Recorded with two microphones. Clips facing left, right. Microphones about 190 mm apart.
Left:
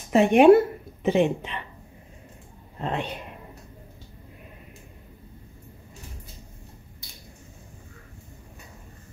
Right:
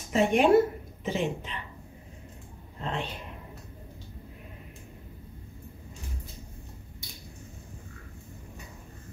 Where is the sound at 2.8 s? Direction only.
55° left (ahead or behind).